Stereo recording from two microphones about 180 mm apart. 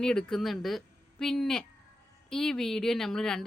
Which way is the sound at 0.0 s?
5° left (ahead or behind).